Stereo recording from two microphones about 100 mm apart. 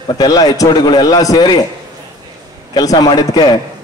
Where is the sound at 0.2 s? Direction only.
40° left (ahead or behind).